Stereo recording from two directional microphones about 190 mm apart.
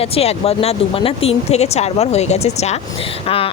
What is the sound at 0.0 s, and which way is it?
Speech, 30° left (ahead or behind).